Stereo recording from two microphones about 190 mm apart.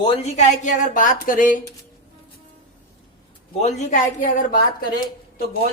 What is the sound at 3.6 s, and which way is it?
Speech, 40° left (ahead or behind).